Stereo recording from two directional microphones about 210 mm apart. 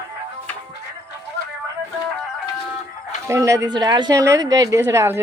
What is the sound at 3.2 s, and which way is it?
A woman's voice, 15° right (ahead or behind).